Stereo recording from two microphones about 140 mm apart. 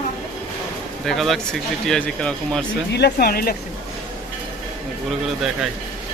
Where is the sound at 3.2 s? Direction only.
90° left.